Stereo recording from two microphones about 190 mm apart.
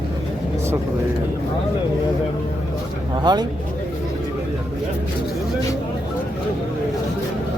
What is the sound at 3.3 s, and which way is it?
Speech, 25° right (ahead or behind).